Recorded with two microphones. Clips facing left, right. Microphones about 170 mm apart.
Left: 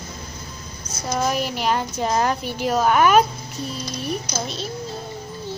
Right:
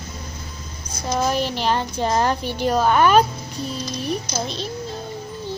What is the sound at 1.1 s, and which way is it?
A woman's voice, 5° left (ahead or behind).